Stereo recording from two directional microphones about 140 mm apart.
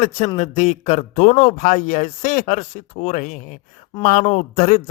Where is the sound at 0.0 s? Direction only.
55° left (ahead or behind).